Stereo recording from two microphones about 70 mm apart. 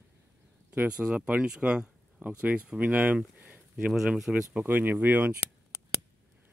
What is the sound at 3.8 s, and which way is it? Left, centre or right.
Speech, centre.